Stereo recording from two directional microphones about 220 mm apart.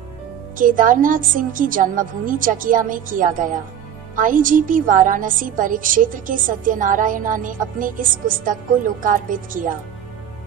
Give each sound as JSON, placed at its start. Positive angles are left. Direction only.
{"t": 0.6, "sound": "a woman's voice", "side_deg": -40}